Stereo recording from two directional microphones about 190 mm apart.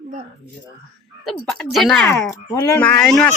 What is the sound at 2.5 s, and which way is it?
Speech, 10° left (ahead or behind).